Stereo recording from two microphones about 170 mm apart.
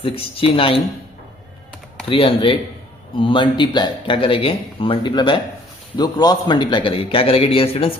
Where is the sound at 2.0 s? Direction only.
30° left (ahead or behind).